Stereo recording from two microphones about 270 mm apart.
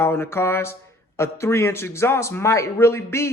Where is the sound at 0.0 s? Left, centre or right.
Centre.